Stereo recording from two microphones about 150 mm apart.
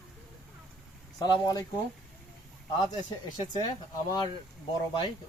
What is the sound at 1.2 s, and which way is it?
Speech, 25° left (ahead or behind).